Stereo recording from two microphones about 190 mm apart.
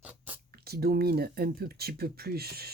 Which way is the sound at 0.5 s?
55° right (ahead or behind).